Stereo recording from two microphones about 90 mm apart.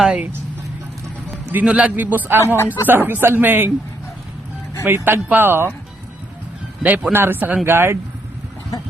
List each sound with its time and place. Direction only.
0.0 s speech: 10° right (ahead or behind)
1.5 s speech: 15° right (ahead or behind)
4.9 s speech: 25° right (ahead or behind)
6.8 s speech: 20° right (ahead or behind)